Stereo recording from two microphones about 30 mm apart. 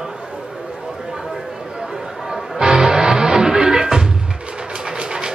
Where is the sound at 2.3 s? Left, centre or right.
Right.